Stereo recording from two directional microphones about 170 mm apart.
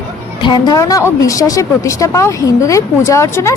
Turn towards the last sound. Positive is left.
turn(degrees=15)  # may be behind; listen again after turning